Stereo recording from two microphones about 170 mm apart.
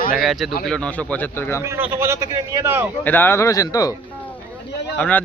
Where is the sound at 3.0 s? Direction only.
10° left (ahead or behind).